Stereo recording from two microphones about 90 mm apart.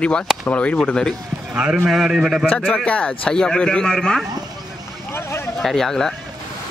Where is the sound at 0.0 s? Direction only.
10° left (ahead or behind).